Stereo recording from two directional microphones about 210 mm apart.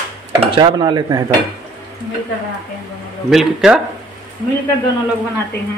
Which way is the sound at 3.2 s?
Centre (ahead or behind).